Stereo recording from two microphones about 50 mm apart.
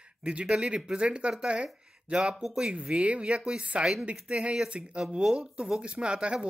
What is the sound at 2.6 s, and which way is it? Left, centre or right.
Speech, centre.